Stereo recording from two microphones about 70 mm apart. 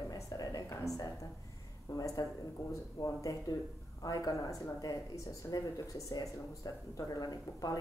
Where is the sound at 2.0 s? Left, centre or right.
Left.